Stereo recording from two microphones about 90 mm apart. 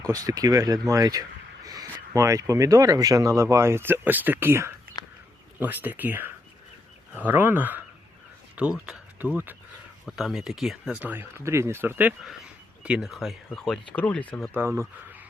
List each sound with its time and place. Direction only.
0.1 s speech: 45° right (ahead or behind); by 7.8 s 20° right (ahead or behind)
8.5 s speech: 10° right (ahead or behind)
10.1 s speech: 5° right (ahead or behind)
10.9 s speech: 20° right (ahead or behind)
12.2 s speech: centre (ahead or behind)
12.8 s speech: 15° right (ahead or behind)
13.1 s speech: centre (ahead or behind)
13.5 s speech: 15° left (ahead or behind)
14.5 s speech: 25° right (ahead or behind)